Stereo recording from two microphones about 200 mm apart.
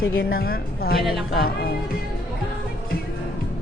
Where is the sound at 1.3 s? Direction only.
50° left (ahead or behind).